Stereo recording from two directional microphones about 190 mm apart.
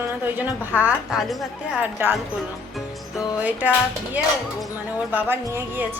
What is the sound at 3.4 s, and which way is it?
A woman's voice, 10° right (ahead or behind).